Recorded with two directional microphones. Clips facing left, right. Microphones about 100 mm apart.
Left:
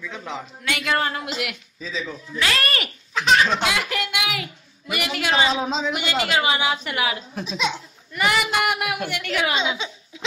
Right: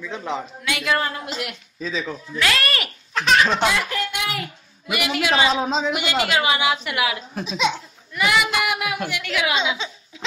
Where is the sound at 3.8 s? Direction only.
85° left.